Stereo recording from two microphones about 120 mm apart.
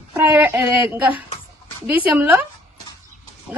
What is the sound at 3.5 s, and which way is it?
Speech, 15° right (ahead or behind).